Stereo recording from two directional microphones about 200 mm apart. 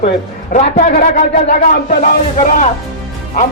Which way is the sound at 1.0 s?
45° left (ahead or behind).